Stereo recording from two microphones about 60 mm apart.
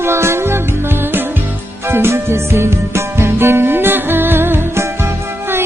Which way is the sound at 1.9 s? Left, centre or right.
Right.